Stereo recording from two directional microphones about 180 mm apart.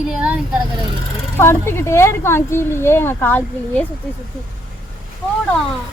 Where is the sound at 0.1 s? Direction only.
5° right (ahead or behind).